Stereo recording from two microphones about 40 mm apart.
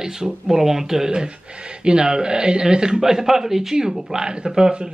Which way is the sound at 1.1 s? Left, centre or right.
Right.